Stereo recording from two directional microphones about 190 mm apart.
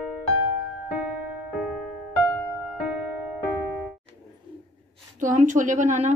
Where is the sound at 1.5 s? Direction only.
Centre (ahead or behind).